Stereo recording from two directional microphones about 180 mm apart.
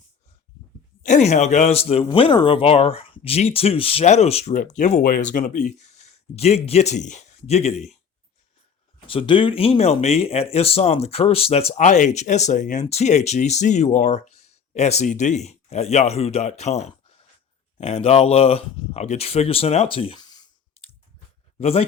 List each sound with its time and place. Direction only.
1.0 s speech: 40° left (ahead or behind)
9.0 s speech: 30° left (ahead or behind)
21.6 s speech: 35° left (ahead or behind)